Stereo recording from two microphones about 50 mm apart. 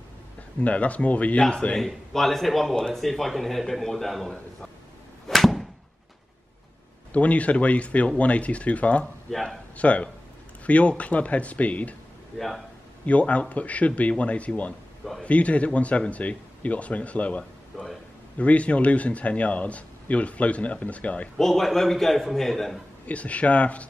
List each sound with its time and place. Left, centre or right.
0.6 s speech: left
1.8 s speech: centre
5.3 s a sound: centre
7.1 s speech: left
9.3 s speech: centre
9.8 s speech: left
12.4 s speech: centre
13.0 s speech: left
21.4 s speech: centre
23.0 s speech: left